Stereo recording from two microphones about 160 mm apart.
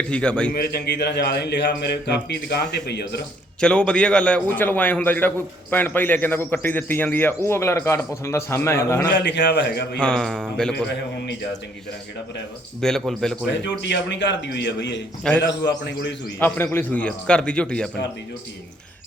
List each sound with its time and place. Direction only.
0.1 s a man's voice: 5° left (ahead or behind)
0.5 s a man's voice: 80° left
3.6 s a man's voice: 5° left (ahead or behind)
9.1 s a man's voice: 90° left
10.0 s speech: 5° left (ahead or behind)
12.8 s speech: 5° left (ahead or behind)
13.8 s a man's voice: 90° left
16.7 s a man's voice: 10° left (ahead or behind)